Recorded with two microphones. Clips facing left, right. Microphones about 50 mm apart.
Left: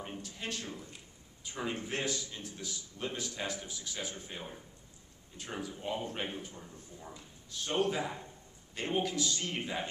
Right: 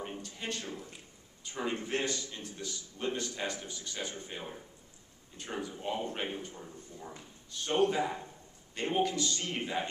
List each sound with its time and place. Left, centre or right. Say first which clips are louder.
0.0 s a man's voice: right 1 dB; centre